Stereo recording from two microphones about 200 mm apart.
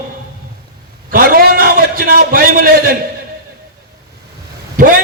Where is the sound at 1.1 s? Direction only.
45° right (ahead or behind).